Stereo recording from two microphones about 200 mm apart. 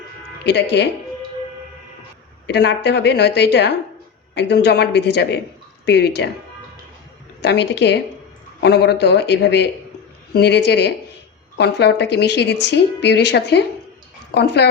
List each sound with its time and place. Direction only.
0.4 s a woman's voice: 55° left (ahead or behind)
2.5 s a woman's voice: 60° left (ahead or behind)
7.4 s a woman's voice: 55° left (ahead or behind)